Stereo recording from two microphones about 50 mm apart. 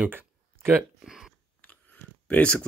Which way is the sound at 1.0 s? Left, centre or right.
Centre.